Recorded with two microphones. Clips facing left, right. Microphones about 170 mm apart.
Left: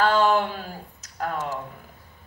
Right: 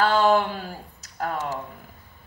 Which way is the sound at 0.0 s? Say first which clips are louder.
Right 1 dB; 40° right (ahead or behind).